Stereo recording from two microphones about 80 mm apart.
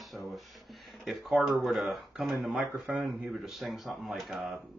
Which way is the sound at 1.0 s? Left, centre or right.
Centre.